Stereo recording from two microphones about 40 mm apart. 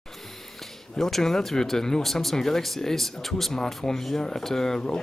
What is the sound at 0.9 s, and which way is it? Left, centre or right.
Speech, centre.